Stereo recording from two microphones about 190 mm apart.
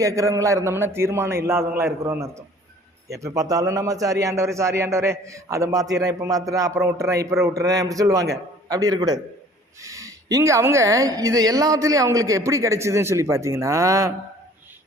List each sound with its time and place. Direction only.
0.0 s a man's voice: 15° right (ahead or behind)